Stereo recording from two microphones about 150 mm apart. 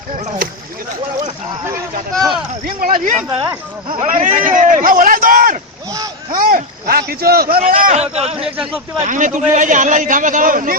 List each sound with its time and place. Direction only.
2.6 s speech: 65° right (ahead or behind)
3.2 s speech: 30° right (ahead or behind)
3.9 s speech: 65° right (ahead or behind); by 7.6 s 85° right
7.7 s speech: 65° right (ahead or behind)
7.9 s speech: 45° right (ahead or behind)
9.0 s speech: 60° right (ahead or behind)